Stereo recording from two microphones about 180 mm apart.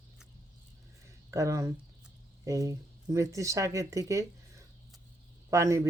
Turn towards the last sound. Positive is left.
turn(degrees=-15)  # may be behind; listen again after turning